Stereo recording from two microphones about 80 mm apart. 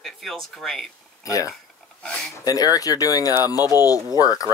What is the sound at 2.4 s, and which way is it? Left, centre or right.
Speech, left.